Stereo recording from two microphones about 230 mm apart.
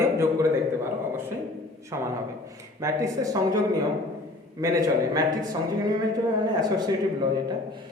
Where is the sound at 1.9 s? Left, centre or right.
Centre.